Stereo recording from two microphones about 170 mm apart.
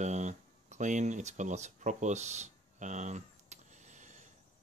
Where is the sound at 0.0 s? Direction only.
45° right (ahead or behind).